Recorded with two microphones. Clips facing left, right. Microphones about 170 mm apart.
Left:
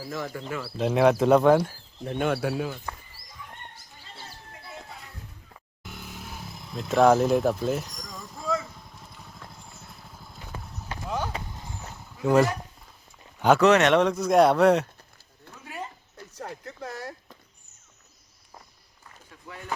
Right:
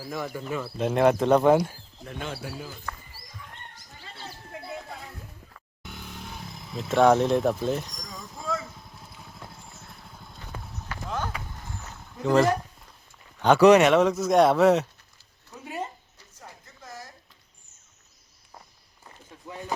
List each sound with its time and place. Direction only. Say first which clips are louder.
0.1 s speech: right 1 dB; 15° right (ahead or behind)
0.6 s speech: left 1 dB; centre (ahead or behind)
2.1 s speech: left 10 dB; 60° left (ahead or behind)
5.8 s vehicle: even; centre (ahead or behind)
11.5 s a sound: left 1 dB; 15° left (ahead or behind)
13.6 s speech: right 5 dB; 10° right (ahead or behind)
15.6 s dog: right 4 dB; 20° right (ahead or behind)
16.3 s a sound: left 10 dB; 70° left (ahead or behind)
19.0 s a sound: right 3 dB; 20° right (ahead or behind)